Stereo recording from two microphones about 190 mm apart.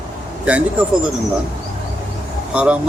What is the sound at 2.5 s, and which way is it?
Speech, 5° right (ahead or behind).